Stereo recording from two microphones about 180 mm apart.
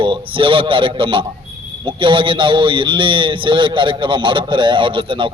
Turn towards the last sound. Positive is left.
turn(degrees=-30)  # may be behind; listen again after turning